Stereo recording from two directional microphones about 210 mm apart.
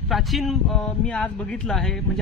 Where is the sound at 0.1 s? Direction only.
Centre (ahead or behind).